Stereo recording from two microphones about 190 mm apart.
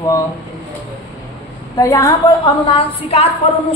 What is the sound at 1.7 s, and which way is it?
Speech, 15° left (ahead or behind).